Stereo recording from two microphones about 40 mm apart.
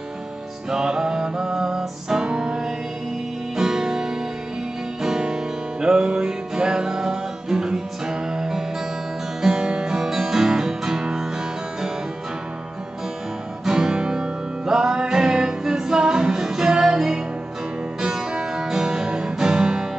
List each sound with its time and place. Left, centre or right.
0.7 s music: centre
13.7 s music: centre
19.3 s guitar: centre